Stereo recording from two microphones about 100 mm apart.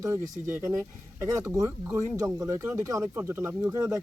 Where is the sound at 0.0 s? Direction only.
30° right (ahead or behind).